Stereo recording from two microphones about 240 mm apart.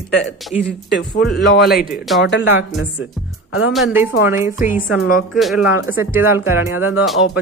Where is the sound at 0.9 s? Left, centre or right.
Left.